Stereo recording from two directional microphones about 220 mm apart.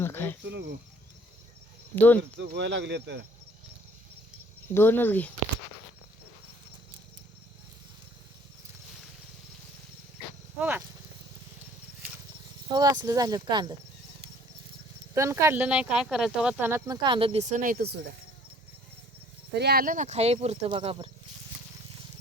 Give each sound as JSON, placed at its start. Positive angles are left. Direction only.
{"t": 0.0, "sound": "speech", "side_deg": 10}
{"t": 0.4, "sound": "speech", "side_deg": -50}
{"t": 2.0, "sound": "speech", "side_deg": 10}
{"t": 2.6, "sound": "speech", "side_deg": -55}
{"t": 4.7, "sound": "speech", "side_deg": 10}
{"t": 10.6, "sound": "speech", "side_deg": -10}
{"t": 12.7, "sound": "speech", "side_deg": -15}
{"t": 15.1, "sound": "speech", "side_deg": -15}
{"t": 19.5, "sound": "speech", "side_deg": -45}